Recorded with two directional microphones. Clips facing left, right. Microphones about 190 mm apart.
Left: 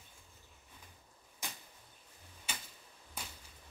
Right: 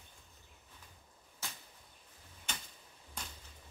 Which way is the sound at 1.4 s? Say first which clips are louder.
Left 1 dB; 15° left (ahead or behind).